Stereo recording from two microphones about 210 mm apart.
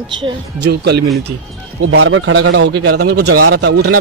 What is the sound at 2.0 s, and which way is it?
Speech, 70° right (ahead or behind).